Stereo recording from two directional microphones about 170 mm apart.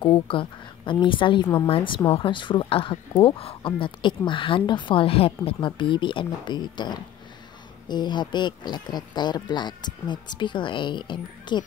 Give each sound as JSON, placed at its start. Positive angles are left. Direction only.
{"t": 0.0, "sound": "a woman's voice", "side_deg": 30}